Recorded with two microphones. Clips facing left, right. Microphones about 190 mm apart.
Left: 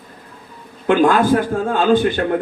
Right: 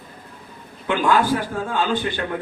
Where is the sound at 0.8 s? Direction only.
45° left (ahead or behind).